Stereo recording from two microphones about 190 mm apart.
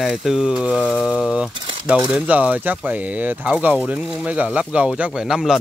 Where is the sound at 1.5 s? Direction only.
25° right (ahead or behind).